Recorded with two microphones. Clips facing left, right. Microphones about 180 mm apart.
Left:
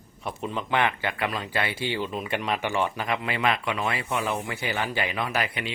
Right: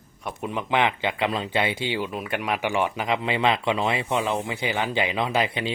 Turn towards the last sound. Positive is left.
turn(degrees=-25)  # may be behind; listen again after turning